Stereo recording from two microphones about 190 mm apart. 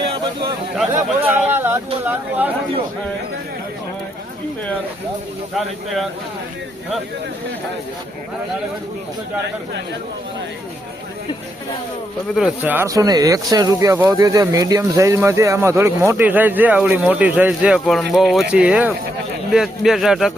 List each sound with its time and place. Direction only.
0.9 s speech: 10° right (ahead or behind)
12.4 s speech: 5° right (ahead or behind)